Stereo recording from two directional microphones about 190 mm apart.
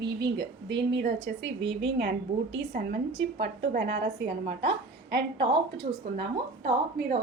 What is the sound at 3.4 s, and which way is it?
Speech, 60° right (ahead or behind).